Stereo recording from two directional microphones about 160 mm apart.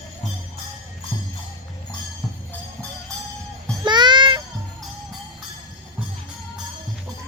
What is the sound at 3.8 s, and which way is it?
Music, 30° right (ahead or behind).